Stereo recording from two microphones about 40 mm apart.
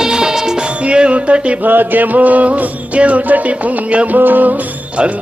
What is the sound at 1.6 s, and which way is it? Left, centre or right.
Music, right.